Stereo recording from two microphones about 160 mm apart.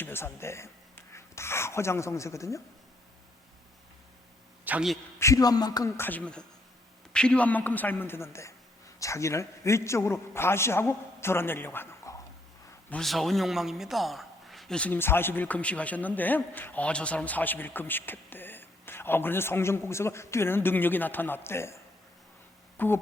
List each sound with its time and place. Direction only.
0.0 s speech: 15° left (ahead or behind)
4.6 s a man's voice: 5° right (ahead or behind)
5.2 s a man's voice: 20° left (ahead or behind)
12.9 s a man's voice: centre (ahead or behind)
22.8 s a sound: 10° left (ahead or behind)